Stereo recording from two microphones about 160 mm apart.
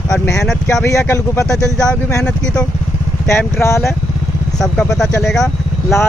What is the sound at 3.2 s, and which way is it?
Speech, 15° left (ahead or behind).